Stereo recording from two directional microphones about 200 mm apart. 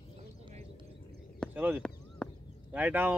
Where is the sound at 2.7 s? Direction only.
10° right (ahead or behind).